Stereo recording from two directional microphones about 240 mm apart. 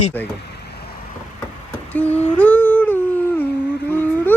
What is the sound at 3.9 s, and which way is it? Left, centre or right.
Vehicle, centre.